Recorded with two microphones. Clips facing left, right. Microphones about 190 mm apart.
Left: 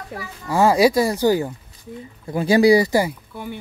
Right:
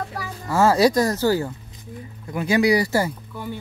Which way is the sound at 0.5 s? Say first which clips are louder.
Left 1 dB; 15° left (ahead or behind).